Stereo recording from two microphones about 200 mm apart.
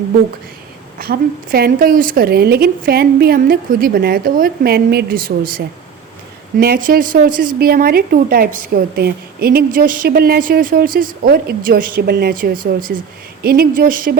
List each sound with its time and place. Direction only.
0.9 s a woman's voice: 50° right (ahead or behind)